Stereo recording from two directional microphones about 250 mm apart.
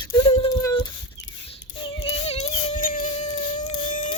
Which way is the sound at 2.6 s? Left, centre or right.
Left.